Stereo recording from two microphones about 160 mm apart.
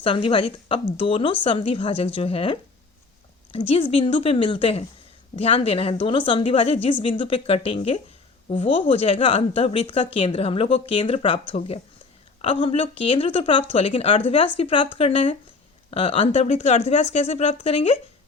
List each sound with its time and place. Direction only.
0.0 s speech: 35° left (ahead or behind)
12.4 s speech: 35° left (ahead or behind)